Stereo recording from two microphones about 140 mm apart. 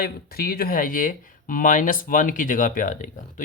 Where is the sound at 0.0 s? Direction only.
90° left.